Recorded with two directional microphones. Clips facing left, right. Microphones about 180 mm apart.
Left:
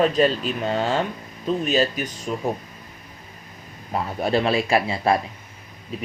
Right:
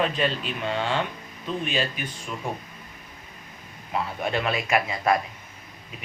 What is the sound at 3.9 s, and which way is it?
Speech, 35° left (ahead or behind).